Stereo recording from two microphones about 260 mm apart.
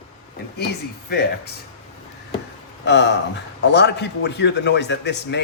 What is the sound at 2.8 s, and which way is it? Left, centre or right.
A man's voice, left.